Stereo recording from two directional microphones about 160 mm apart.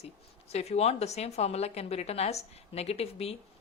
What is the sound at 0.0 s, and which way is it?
A woman's voice, 40° left (ahead or behind).